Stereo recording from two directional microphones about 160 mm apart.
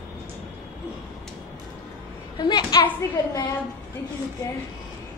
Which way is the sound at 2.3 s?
25° left (ahead or behind).